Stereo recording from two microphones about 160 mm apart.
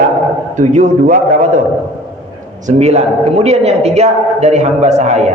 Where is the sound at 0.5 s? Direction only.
45° right (ahead or behind).